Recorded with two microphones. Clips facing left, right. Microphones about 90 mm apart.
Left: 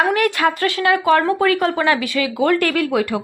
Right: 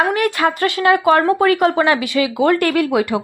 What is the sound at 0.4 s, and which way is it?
A woman's voice, 20° right (ahead or behind).